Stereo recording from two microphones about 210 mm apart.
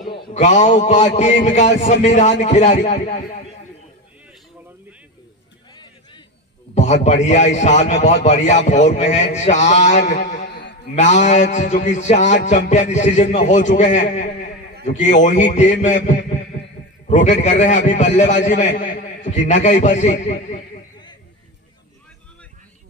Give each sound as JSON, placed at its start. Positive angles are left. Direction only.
{"t": 0.1, "sound": "a man's voice", "side_deg": 35}
{"t": 6.7, "sound": "a man's voice", "side_deg": 35}
{"t": 17.1, "sound": "a man's voice", "side_deg": 35}